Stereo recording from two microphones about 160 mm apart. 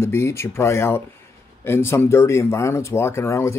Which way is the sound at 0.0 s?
15° left (ahead or behind).